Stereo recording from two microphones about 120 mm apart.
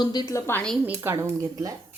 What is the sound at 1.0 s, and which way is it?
Speech, 25° right (ahead or behind).